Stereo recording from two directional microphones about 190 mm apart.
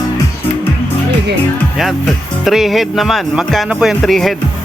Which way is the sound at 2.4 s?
Centre (ahead or behind).